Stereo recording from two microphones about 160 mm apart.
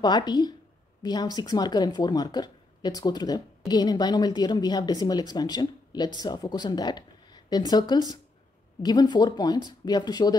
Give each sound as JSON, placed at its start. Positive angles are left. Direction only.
{"t": 0.0, "sound": "speech", "side_deg": 25}